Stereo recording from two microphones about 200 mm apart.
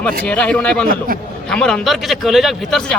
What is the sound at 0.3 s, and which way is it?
Speech, 5° left (ahead or behind).